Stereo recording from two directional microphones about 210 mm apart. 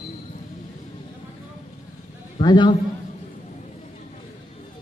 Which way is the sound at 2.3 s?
20° left (ahead or behind).